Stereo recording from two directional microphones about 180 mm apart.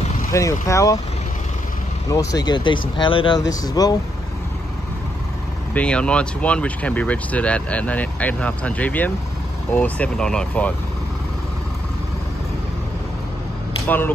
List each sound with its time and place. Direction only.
0.3 s speech: 15° left (ahead or behind)
2.0 s speech: 20° left (ahead or behind)
5.8 s speech: 5° left (ahead or behind)
13.8 s speech: 10° left (ahead or behind)